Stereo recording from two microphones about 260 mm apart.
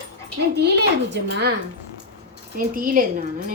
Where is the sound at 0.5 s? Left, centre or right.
Right.